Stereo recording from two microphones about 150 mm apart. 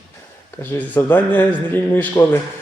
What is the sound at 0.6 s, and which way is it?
Speech, 10° left (ahead or behind).